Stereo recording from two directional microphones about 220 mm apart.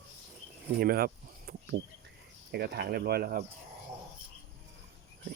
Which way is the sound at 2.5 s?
45° right (ahead or behind).